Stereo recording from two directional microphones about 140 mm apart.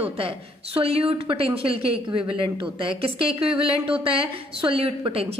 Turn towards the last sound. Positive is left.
turn(degrees=-45)  # may be behind; listen again after turning